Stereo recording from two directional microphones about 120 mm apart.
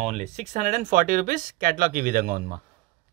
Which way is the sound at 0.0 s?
70° right (ahead or behind).